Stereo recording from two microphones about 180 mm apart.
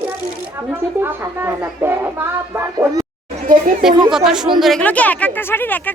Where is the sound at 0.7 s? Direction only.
10° right (ahead or behind).